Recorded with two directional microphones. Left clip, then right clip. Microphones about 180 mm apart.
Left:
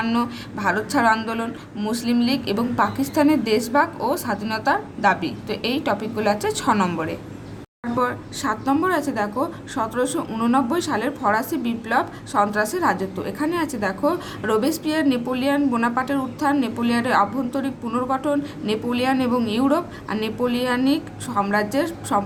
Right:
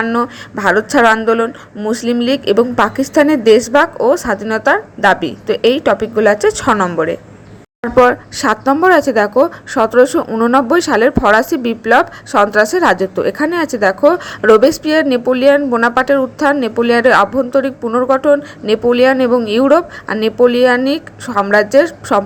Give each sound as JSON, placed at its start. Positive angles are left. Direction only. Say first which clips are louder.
{"t": 0.2, "sound": "a woman's voice", "louder": "right 9 dB", "side_deg": -35}
{"t": 7.8, "sound": "a woman's voice", "louder": "right 14 dB", "side_deg": -40}